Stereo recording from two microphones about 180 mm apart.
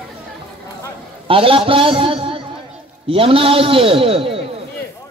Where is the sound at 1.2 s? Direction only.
30° right (ahead or behind).